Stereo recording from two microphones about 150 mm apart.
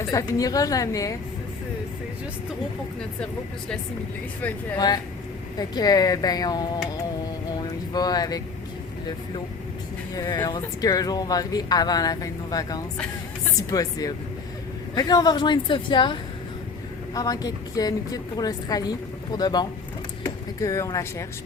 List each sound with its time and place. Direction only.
0.0 s speech: 20° left (ahead or behind)
5.5 s speech: 25° left (ahead or behind)
7.5 s a sound: 25° left (ahead or behind)
10.2 s speech: 25° left (ahead or behind)
17.2 s speech: 25° left (ahead or behind)